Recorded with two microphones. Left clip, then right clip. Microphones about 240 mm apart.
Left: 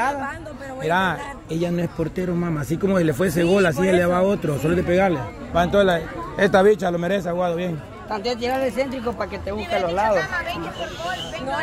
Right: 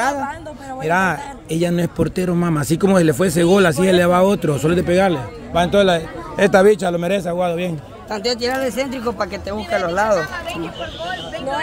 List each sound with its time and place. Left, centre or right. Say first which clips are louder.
0.8 s a man's voice: right 3 dB; right
8.1 s speech: right 3 dB; right